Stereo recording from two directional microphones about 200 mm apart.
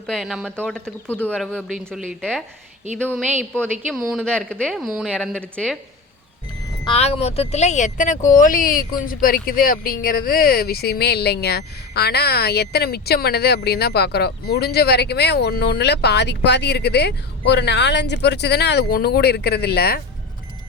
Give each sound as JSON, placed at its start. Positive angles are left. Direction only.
{"t": 0.1, "sound": "speech", "side_deg": 0}
{"t": 3.1, "sound": "speech", "side_deg": -10}
{"t": 3.5, "sound": "speech", "side_deg": 5}
{"t": 6.8, "sound": "speech", "side_deg": 30}